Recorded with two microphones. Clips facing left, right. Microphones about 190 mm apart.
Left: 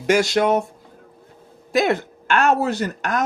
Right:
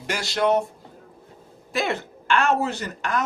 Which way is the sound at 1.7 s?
40° left (ahead or behind).